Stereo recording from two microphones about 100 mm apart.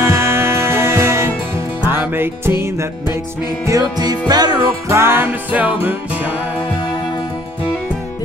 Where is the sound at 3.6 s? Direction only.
40° right (ahead or behind).